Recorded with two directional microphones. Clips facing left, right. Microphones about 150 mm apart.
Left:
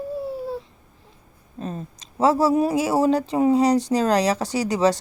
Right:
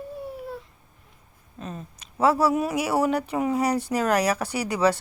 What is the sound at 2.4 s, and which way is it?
Speech, 35° left (ahead or behind).